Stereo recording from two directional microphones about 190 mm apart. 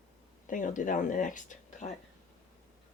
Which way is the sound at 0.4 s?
45° left (ahead or behind).